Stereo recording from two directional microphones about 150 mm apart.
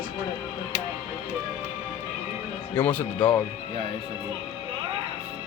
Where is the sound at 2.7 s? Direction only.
10° left (ahead or behind).